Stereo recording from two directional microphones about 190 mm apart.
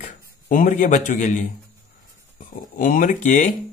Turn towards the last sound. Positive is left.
turn(degrees=40)  # may be behind; listen again after turning